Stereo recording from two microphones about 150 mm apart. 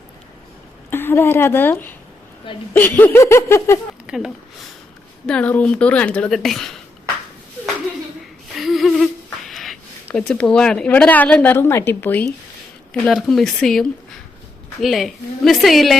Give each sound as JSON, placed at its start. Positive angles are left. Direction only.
{"t": 0.9, "sound": "a woman's voice", "side_deg": 15}
{"t": 4.0, "sound": "a sound", "side_deg": -5}
{"t": 5.2, "sound": "a woman's voice", "side_deg": 10}
{"t": 8.5, "sound": "humming", "side_deg": 0}
{"t": 10.1, "sound": "a woman's voice", "side_deg": 10}